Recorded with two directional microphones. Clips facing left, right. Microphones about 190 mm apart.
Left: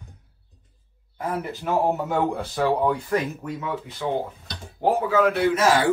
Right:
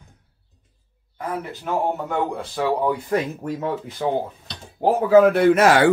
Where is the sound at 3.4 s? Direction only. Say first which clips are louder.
Right 4 dB; 40° right (ahead or behind).